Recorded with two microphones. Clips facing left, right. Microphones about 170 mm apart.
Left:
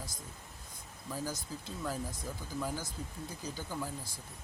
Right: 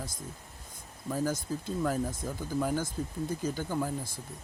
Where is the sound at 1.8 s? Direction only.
55° right (ahead or behind).